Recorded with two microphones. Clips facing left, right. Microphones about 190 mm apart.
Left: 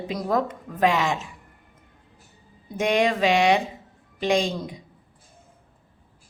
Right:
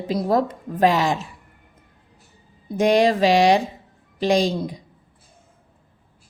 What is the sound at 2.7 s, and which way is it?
A woman's voice, 35° right (ahead or behind).